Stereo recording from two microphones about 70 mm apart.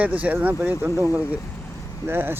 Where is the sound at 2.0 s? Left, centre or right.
Right.